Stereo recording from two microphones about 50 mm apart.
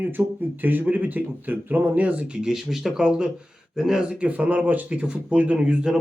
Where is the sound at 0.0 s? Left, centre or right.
Right.